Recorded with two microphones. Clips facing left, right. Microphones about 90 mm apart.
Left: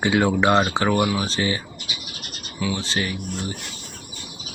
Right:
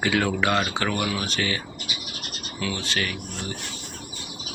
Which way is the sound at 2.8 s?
25° left (ahead or behind).